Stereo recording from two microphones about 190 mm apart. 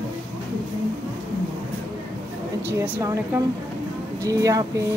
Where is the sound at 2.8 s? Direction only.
15° right (ahead or behind).